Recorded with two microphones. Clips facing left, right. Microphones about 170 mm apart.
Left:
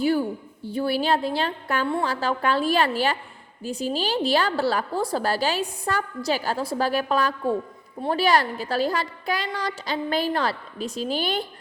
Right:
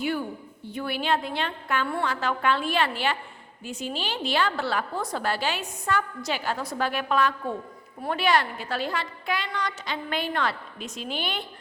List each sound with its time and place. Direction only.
0.0 s a woman's voice: 35° left (ahead or behind)